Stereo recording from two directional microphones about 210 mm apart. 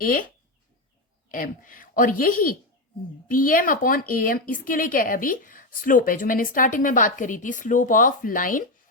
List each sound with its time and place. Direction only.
0.0 s a woman's voice: 40° left (ahead or behind)
1.3 s a woman's voice: 40° left (ahead or behind)